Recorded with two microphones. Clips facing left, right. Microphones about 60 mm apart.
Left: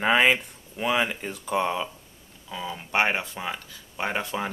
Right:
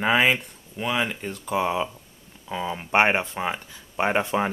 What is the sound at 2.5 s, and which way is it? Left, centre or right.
Speech, right.